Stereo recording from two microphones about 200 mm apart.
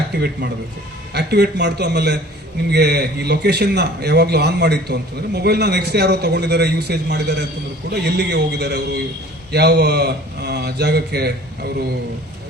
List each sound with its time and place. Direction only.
0.1 s a man's voice: 55° right (ahead or behind)